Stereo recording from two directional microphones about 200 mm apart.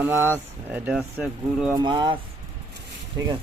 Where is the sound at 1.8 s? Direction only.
20° right (ahead or behind).